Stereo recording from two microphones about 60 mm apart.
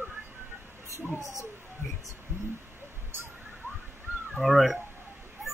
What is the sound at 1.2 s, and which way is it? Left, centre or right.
Speech, left.